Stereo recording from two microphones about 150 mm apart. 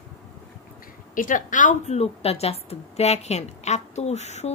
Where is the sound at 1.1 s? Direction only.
60° left (ahead or behind).